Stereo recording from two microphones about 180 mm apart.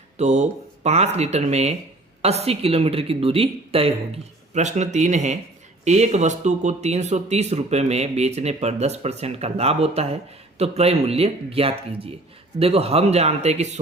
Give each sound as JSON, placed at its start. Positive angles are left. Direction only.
{"t": 0.2, "sound": "speech", "side_deg": -40}